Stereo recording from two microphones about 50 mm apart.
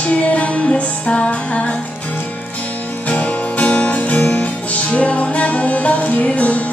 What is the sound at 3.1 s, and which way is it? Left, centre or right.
Music, left.